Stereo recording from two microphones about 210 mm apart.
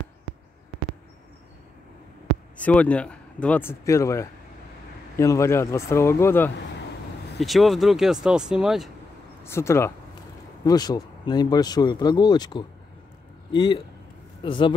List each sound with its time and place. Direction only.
2.5 s speech: 5° left (ahead or behind)
7.3 s speech: centre (ahead or behind)
9.4 s speech: 10° left (ahead or behind)